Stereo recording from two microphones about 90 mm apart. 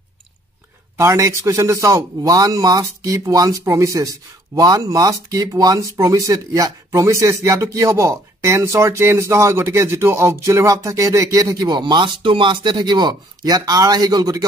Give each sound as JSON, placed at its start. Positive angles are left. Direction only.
{"t": 0.9, "sound": "a man's voice", "side_deg": -35}